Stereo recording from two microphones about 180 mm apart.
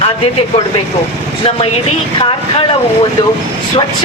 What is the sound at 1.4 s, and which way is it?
Speech, 30° left (ahead or behind).